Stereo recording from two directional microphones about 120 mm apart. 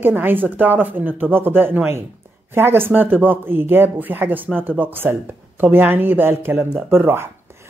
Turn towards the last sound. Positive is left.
turn(degrees=-20)  # may be behind; listen again after turning